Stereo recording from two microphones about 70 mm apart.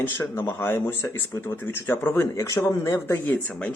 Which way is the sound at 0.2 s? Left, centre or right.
Left.